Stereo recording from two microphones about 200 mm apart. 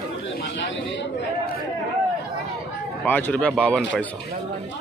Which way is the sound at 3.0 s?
10° left (ahead or behind).